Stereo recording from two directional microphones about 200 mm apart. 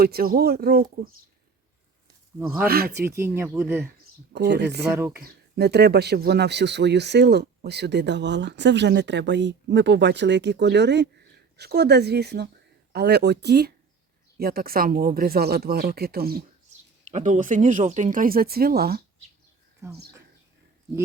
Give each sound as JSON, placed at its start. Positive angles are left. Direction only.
{"t": 0.0, "sound": "speech", "side_deg": -50}
{"t": 2.4, "sound": "speech", "side_deg": -5}
{"t": 2.6, "sound": "speech", "side_deg": -50}
{"t": 3.2, "sound": "speech", "side_deg": -10}
{"t": 4.3, "sound": "speech", "side_deg": -55}
{"t": 4.9, "sound": "speech", "side_deg": -10}
{"t": 5.2, "sound": "speech", "side_deg": -55}
{"t": 17.1, "sound": "speech", "side_deg": -35}